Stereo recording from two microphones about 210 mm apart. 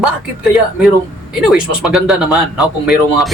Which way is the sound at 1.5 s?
Centre (ahead or behind).